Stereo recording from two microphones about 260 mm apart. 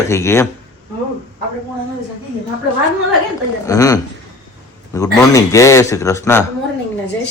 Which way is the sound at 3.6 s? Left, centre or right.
Centre.